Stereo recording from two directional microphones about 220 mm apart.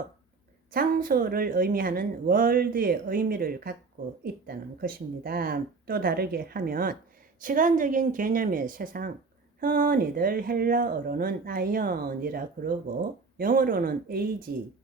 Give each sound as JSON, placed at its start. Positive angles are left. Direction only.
{"t": 0.7, "sound": "speech", "side_deg": -40}